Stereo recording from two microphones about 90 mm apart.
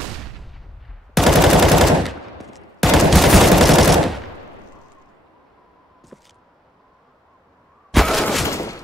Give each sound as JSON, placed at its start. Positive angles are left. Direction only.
{"t": 1.1, "sound": "machine gun", "side_deg": 0}
{"t": 6.1, "sound": "vehicle", "side_deg": 0}
{"t": 7.9, "sound": "a sound", "side_deg": 0}
{"t": 8.5, "sound": "fusillade", "side_deg": 35}